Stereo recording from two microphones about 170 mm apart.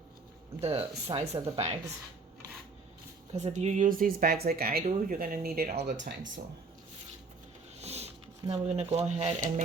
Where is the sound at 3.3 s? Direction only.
40° right (ahead or behind); by 5.7 s 60° right (ahead or behind).